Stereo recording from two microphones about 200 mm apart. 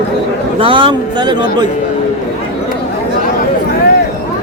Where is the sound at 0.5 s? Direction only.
25° right (ahead or behind).